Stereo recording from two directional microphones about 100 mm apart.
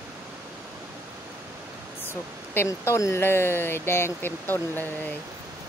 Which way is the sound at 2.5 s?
25° left (ahead or behind).